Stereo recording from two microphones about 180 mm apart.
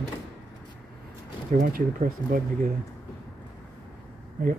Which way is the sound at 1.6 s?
50° right (ahead or behind).